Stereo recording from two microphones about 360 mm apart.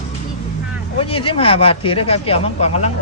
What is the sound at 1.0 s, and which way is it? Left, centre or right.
Speech, centre.